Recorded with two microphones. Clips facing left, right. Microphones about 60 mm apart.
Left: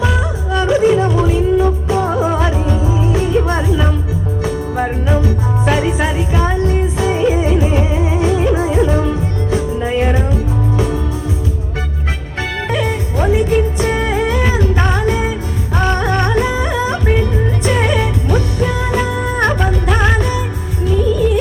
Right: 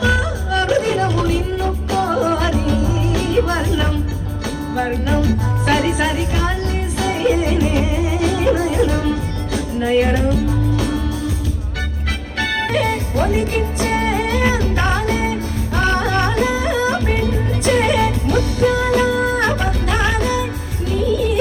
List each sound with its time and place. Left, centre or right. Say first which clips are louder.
0.0 s music: even; left
12.4 s music: even; left